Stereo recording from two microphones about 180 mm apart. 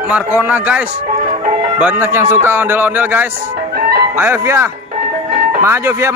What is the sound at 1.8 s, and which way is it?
Speech, 10° right (ahead or behind).